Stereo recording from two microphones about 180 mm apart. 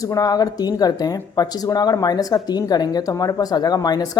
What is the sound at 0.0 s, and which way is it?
Speech, 20° left (ahead or behind).